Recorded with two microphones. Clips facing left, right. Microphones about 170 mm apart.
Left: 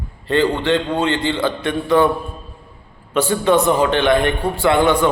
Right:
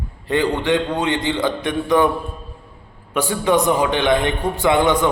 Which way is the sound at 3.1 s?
15° right (ahead or behind).